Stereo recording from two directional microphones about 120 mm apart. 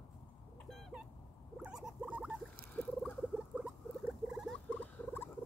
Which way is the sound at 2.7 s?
10° left (ahead or behind).